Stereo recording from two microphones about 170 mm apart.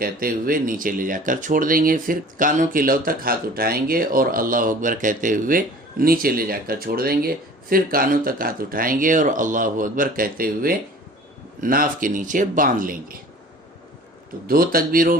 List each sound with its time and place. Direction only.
0.0 s speech: 60° right (ahead or behind)
14.4 s speech: 60° right (ahead or behind)